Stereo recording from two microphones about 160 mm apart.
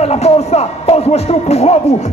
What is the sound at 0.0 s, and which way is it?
Speech, 40° left (ahead or behind).